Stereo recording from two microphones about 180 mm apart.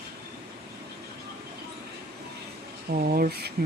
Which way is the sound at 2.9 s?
55° right (ahead or behind).